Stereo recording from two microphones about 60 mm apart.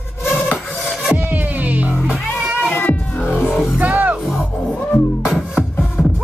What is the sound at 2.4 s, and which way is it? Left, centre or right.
Cat, centre.